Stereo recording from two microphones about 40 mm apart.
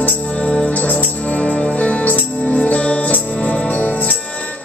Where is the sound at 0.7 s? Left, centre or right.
Left.